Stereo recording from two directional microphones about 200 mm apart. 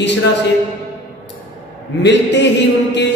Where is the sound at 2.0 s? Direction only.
60° left (ahead or behind).